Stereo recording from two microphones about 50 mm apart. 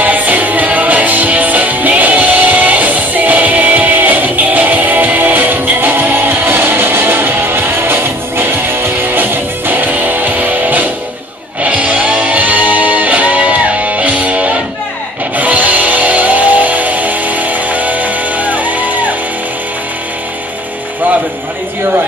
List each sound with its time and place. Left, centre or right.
0.0 s music: right